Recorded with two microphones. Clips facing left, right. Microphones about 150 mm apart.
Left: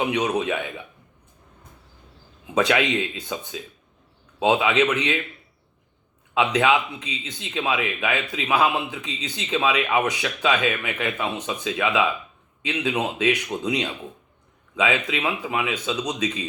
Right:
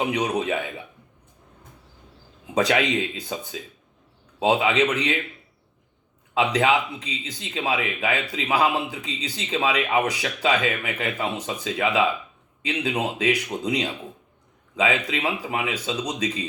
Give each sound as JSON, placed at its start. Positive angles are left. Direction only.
{"t": 0.0, "sound": "a man's voice", "side_deg": -35}
{"t": 2.6, "sound": "a man's voice", "side_deg": -35}
{"t": 6.3, "sound": "a man's voice", "side_deg": -35}
{"t": 13.1, "sound": "a man's voice", "side_deg": -35}